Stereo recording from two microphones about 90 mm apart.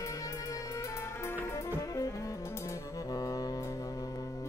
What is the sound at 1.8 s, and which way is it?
Music, 40° left (ahead or behind).